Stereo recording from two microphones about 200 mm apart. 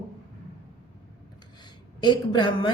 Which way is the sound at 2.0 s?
25° left (ahead or behind).